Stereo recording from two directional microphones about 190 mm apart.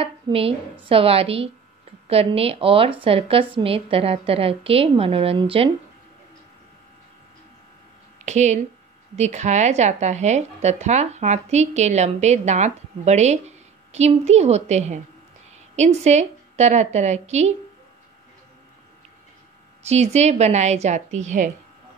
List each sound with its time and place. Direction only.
0.0 s a woman's voice: 30° right (ahead or behind)
8.3 s speech: 40° right (ahead or behind)
19.8 s speech: 35° right (ahead or behind)